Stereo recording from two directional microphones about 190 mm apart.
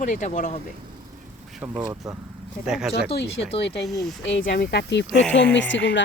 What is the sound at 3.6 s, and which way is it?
Speech, 65° left (ahead or behind).